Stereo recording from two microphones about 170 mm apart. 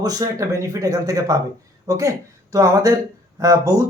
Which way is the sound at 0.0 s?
20° right (ahead or behind).